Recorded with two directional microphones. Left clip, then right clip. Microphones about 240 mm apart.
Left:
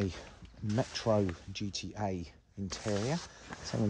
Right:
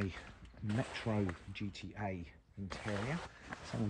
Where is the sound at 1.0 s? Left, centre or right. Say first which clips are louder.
Left 9 dB; centre.